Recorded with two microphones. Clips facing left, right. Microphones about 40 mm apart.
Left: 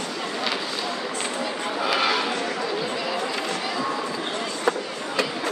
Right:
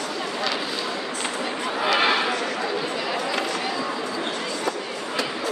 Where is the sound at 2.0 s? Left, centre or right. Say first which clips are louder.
Right 2 dB; right.